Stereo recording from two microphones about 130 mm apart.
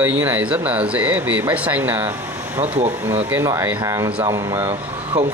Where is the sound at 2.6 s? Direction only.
55° right (ahead or behind).